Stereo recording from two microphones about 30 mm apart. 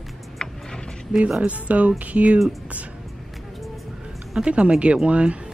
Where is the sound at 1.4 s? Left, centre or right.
Right.